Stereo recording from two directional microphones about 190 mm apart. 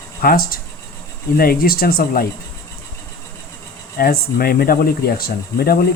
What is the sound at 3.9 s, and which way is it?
Speech, 50° left (ahead or behind).